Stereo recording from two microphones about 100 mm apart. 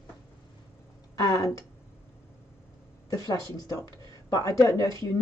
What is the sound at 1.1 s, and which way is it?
Speech, 35° left (ahead or behind).